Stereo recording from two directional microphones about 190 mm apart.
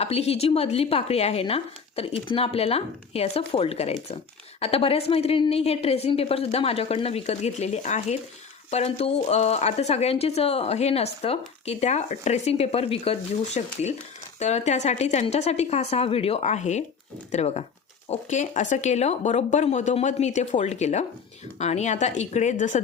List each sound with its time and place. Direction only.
0.0 s speech: 35° left (ahead or behind)